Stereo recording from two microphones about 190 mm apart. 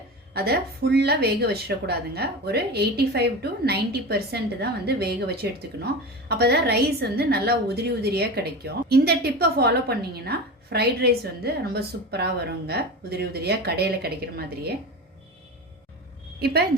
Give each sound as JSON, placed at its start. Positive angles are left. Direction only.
{"t": 0.3, "sound": "a woman's voice", "side_deg": -55}
{"t": 16.4, "sound": "a woman's voice", "side_deg": -55}